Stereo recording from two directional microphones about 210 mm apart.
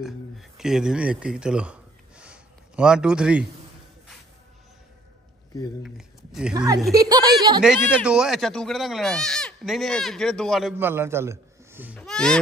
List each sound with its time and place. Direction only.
0.0 s speech: centre (ahead or behind)
5.8 s speech: centre (ahead or behind)
6.5 s a woman's voice: 20° right (ahead or behind)
7.6 s speech: 5° right (ahead or behind)
10.8 s a man's voice: 10° right (ahead or behind)
12.0 s a sound: 5° left (ahead or behind)